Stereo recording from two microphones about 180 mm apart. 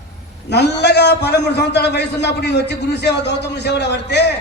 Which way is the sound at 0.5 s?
70° left (ahead or behind).